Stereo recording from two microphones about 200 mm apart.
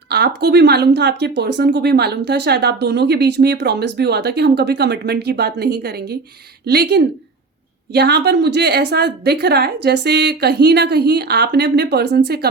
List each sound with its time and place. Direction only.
0.1 s speech: 55° right (ahead or behind)